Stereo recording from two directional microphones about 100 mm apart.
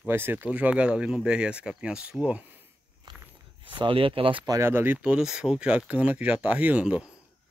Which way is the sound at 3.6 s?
55° right (ahead or behind).